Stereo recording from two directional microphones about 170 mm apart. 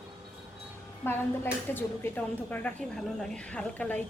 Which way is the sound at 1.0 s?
10° left (ahead or behind).